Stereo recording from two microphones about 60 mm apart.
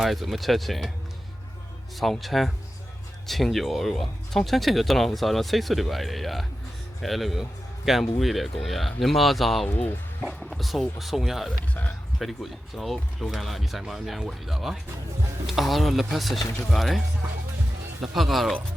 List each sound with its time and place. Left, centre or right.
0.0 s speech: centre
2.0 s speech: centre
9.6 s speech: left
10.2 s speech: centre
11.7 s speech: left
12.2 s speech: centre
18.0 s speech: centre